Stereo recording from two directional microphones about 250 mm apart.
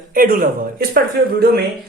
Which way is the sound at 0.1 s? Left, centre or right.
Right.